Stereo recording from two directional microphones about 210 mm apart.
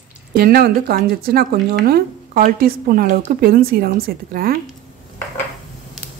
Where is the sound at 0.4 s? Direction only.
45° right (ahead or behind).